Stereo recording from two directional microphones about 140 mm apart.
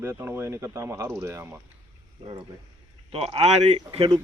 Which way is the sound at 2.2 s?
40° right (ahead or behind).